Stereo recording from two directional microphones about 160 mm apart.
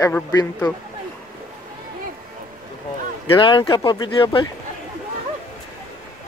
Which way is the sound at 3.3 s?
30° left (ahead or behind).